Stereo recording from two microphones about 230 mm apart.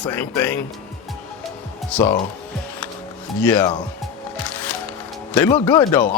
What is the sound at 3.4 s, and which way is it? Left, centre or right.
Speech, centre.